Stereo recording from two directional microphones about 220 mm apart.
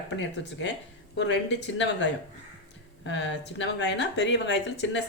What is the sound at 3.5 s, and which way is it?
A woman's voice, 50° left (ahead or behind).